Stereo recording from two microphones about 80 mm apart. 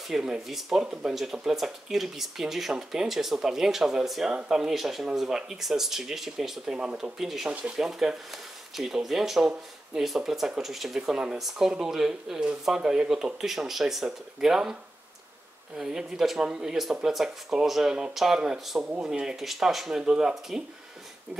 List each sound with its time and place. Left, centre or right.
0.1 s speech: centre